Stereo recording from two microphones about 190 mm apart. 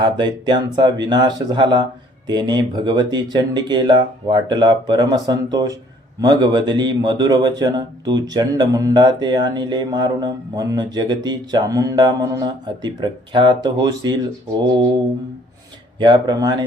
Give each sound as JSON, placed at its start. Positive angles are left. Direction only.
{"t": 0.0, "sound": "a man's voice", "side_deg": -25}
{"t": 16.0, "sound": "a man's voice", "side_deg": -20}